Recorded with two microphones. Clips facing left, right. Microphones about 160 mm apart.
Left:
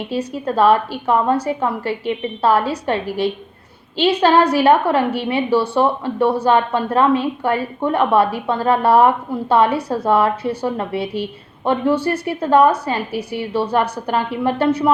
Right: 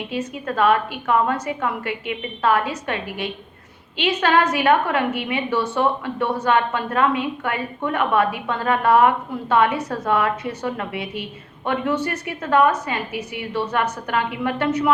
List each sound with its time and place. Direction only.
0.1 s a woman's voice: 35° left (ahead or behind)